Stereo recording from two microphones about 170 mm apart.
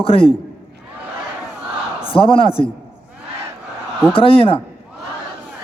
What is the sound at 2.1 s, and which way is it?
Speech, 30° left (ahead or behind).